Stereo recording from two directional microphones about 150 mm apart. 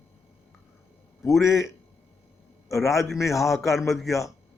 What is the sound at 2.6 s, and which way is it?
Speech, 20° left (ahead or behind).